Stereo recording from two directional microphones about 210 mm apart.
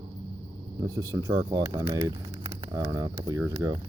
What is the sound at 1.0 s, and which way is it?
Speech, 15° right (ahead or behind).